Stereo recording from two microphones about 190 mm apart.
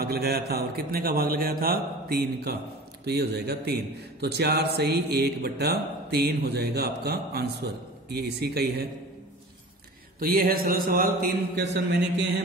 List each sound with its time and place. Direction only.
0.0 s a man's voice: 55° right (ahead or behind)
10.2 s a man's voice: 50° right (ahead or behind)